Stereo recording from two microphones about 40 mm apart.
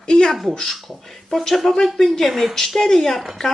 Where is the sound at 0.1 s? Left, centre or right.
Centre.